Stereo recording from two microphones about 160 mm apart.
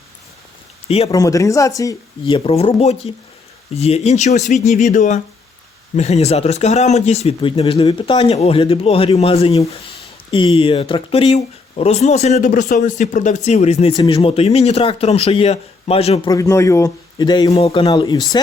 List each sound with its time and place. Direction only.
0.9 s speech: 40° left (ahead or behind)
1.1 s a man's voice: 20° left (ahead or behind)
2.2 s speech: 35° left (ahead or behind)
13.9 s speech: 30° left (ahead or behind)
16.3 s a man's voice: 20° left (ahead or behind)
17.5 s speech: 40° left (ahead or behind)
17.8 s a man's voice: 25° left (ahead or behind)